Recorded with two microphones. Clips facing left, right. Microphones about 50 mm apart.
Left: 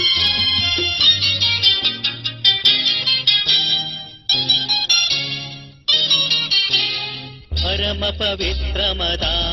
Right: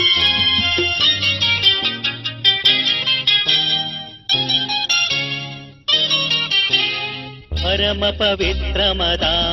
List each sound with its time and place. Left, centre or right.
0.0 s music: right